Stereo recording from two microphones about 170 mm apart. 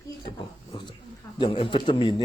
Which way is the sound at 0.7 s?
25° left (ahead or behind).